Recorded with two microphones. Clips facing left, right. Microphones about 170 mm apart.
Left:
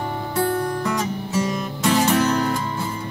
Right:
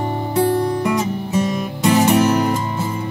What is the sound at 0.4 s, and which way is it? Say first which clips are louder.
Music: right 5 dB; 15° right (ahead or behind).